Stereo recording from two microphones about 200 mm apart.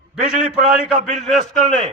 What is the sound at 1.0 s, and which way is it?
Speech, 35° right (ahead or behind).